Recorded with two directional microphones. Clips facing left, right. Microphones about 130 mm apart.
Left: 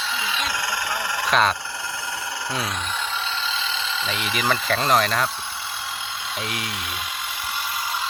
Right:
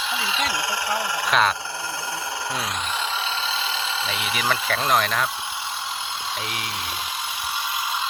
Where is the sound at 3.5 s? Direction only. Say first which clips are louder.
Right 1 dB; 35° right (ahead or behind).